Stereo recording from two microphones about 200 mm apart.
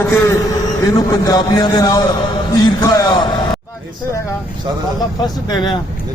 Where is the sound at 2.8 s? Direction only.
20° left (ahead or behind).